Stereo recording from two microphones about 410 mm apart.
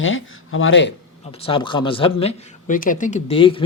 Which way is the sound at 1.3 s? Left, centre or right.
Centre.